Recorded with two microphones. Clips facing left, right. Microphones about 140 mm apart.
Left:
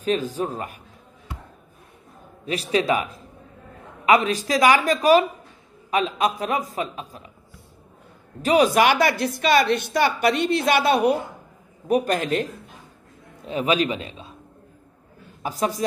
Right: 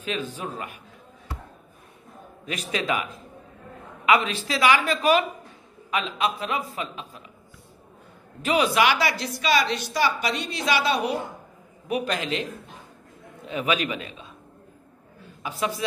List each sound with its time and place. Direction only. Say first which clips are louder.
0.0 s a man's voice: left 7 dB; 40° left (ahead or behind)
2.4 s a man's voice: left 6 dB; 35° left (ahead or behind)
8.4 s a woman's voice: left 4 dB; 40° left (ahead or behind)
13.5 s a man's voice: left 4 dB; 35° left (ahead or behind)
15.4 s a man's voice: left 4 dB; 40° left (ahead or behind)